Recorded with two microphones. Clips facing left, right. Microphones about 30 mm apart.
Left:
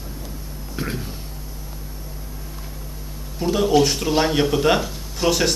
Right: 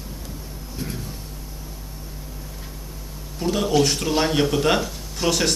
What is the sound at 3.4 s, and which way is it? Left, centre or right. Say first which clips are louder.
Speech: left 3 dB; centre.